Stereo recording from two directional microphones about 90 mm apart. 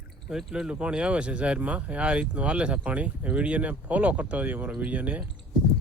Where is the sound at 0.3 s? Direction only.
5° right (ahead or behind).